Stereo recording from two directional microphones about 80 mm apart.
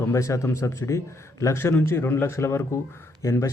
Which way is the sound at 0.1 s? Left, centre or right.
Left.